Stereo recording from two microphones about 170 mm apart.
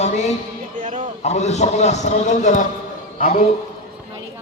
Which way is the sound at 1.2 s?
40° left (ahead or behind).